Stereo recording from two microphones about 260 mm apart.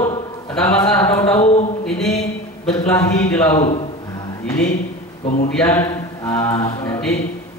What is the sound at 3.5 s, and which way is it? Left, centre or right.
Speech, left.